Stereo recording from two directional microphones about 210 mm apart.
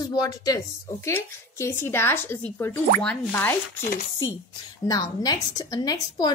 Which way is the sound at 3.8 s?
40° left (ahead or behind).